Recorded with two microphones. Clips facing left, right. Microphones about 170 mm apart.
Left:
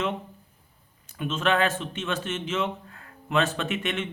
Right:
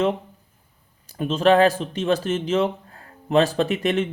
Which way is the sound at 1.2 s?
35° right (ahead or behind).